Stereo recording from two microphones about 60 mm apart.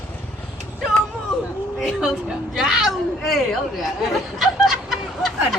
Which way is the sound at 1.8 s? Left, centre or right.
Centre.